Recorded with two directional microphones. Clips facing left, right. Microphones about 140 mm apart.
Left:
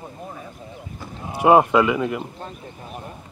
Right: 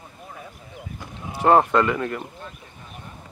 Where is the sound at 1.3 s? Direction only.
10° left (ahead or behind).